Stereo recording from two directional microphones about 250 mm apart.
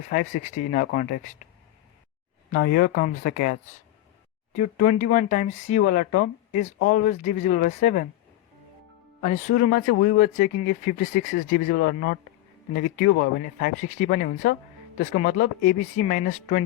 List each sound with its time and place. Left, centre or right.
0.1 s speech: left
2.6 s speech: left
9.2 s speech: left